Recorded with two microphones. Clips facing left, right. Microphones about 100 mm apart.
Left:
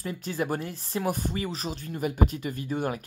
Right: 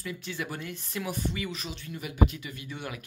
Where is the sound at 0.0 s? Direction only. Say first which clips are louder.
Left 5 dB; 40° left (ahead or behind).